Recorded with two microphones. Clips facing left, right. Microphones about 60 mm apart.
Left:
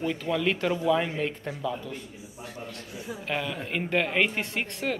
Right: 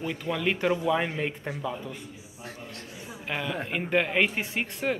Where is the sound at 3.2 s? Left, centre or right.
Centre.